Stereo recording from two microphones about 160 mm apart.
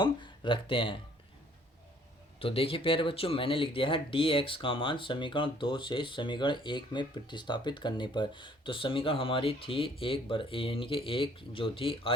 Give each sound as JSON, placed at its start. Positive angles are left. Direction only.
{"t": 0.0, "sound": "speech", "side_deg": 30}
{"t": 2.4, "sound": "speech", "side_deg": 35}